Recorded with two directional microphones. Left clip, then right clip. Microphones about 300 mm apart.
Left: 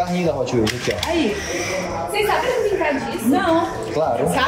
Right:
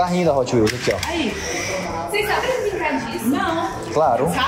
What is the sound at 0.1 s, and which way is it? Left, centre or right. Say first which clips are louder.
Speech: right 3 dB; centre.